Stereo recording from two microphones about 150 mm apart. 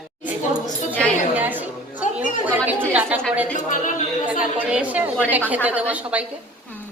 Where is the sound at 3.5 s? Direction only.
60° left (ahead or behind).